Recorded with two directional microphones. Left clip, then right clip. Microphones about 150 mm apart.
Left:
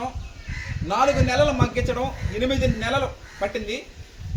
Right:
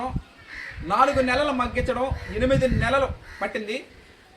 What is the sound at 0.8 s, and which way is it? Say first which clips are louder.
A man's voice: right 1 dB; 15° left (ahead or behind).